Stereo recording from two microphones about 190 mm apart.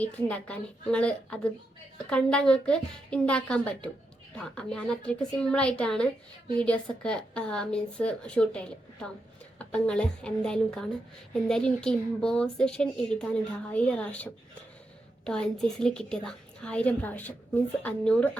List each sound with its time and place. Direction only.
0.0 s a woman's voice: 5° left (ahead or behind)